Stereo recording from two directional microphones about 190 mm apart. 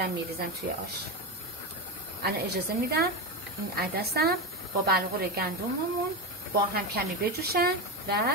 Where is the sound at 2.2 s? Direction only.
55° right (ahead or behind).